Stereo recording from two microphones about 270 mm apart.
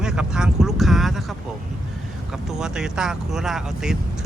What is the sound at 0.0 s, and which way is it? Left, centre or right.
Vehicle, centre.